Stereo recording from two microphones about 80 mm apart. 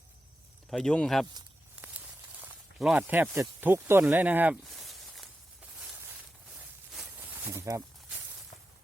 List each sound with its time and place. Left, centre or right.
0.7 s speech: centre
2.7 s speech: centre
3.1 s speech: right
4.6 s a sound: centre
7.2 s a sound: right
7.5 s speech: right